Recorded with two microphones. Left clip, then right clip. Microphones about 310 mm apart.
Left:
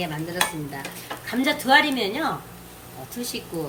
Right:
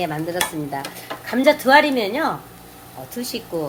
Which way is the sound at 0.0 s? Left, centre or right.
Centre.